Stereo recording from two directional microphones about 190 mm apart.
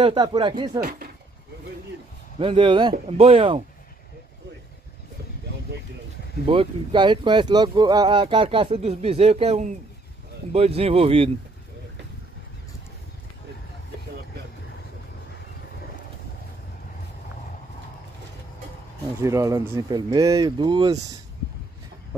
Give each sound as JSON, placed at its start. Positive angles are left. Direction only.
{"t": 0.0, "sound": "speech", "side_deg": -25}
{"t": 0.7, "sound": "speech", "side_deg": -50}
{"t": 2.3, "sound": "speech", "side_deg": -25}
{"t": 6.4, "sound": "speech", "side_deg": -30}
{"t": 19.2, "sound": "speech", "side_deg": -15}